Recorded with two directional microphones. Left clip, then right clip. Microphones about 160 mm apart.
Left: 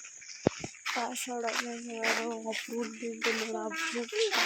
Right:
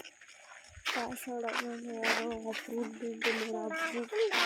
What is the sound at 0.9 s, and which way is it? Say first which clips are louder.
Speech: left 2 dB; 10° left (ahead or behind).